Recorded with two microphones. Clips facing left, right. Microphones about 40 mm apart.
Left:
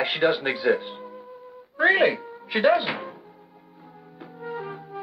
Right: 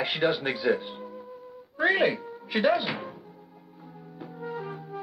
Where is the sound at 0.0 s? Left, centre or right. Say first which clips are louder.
Left 4 dB; centre.